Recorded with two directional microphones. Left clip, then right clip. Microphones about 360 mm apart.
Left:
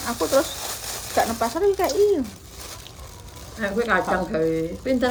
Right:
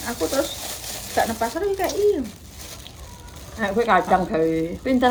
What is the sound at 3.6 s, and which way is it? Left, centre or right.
Speech, centre.